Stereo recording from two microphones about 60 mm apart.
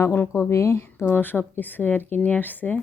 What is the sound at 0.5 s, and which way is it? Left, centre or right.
Speech, left.